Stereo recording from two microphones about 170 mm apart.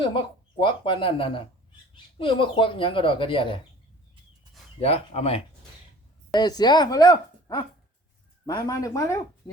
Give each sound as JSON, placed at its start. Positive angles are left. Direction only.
{"t": 0.6, "sound": "speech", "side_deg": 30}
{"t": 4.8, "sound": "speech", "side_deg": 35}
{"t": 6.3, "sound": "speech", "side_deg": 25}